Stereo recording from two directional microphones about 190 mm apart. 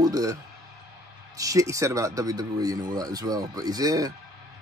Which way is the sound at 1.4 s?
15° right (ahead or behind).